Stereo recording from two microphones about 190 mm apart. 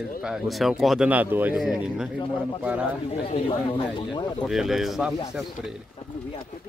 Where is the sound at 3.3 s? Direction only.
30° left (ahead or behind).